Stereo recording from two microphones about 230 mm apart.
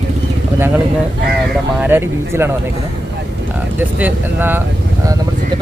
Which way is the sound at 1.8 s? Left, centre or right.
Centre.